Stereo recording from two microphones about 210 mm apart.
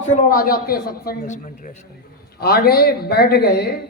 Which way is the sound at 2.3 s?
50° left (ahead or behind).